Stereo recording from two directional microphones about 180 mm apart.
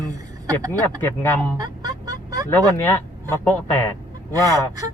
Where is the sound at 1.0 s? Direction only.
10° left (ahead or behind).